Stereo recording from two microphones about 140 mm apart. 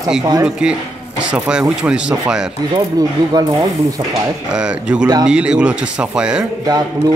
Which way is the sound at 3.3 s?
30° right (ahead or behind).